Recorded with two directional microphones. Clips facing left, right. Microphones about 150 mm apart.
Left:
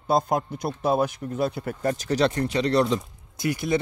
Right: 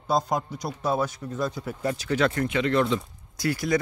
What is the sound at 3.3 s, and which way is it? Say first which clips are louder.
Speech: even; 20° left (ahead or behind).